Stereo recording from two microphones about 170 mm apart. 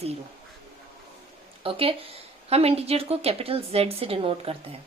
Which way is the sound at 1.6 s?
35° right (ahead or behind).